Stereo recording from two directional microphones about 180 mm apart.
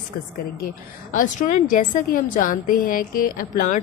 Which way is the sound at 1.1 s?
45° left (ahead or behind).